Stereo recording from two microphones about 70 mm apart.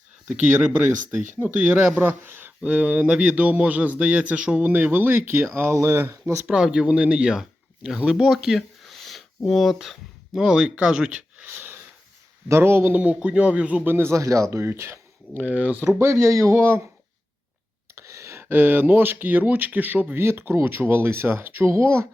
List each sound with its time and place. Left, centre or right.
0.3 s a man's voice: centre
2.6 s a man's voice: centre
5.7 s speech: right
6.5 s speech: centre
8.1 s a sound: centre
9.5 s speech: centre
11.4 s wheeze: right
12.5 s speech: right
12.9 s speech: right
13.8 s speech: right
15.4 s a man's voice: right
16.0 s speech: right
17.9 s speech: right